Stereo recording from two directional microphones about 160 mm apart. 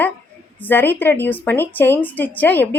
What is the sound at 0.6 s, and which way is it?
A woman's voice, 10° left (ahead or behind).